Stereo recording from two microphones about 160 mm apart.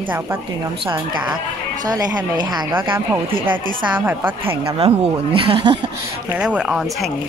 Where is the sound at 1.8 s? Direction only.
25° right (ahead or behind).